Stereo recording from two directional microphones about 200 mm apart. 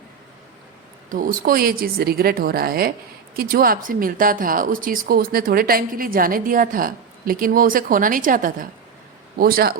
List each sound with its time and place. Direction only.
1.1 s a woman's voice: 45° right (ahead or behind)